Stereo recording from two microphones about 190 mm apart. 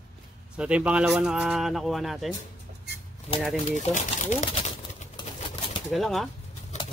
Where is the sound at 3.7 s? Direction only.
40° left (ahead or behind).